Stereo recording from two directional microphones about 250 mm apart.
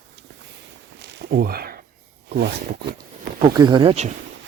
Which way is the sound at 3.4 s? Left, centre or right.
Centre.